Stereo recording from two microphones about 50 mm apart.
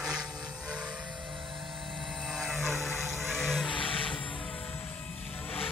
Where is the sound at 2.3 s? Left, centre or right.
Centre.